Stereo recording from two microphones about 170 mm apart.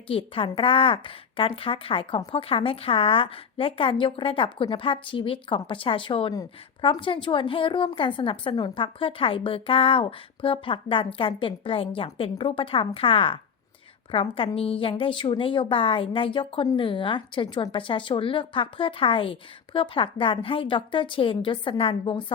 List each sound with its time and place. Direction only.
0.1 s a woman's voice: 30° left (ahead or behind)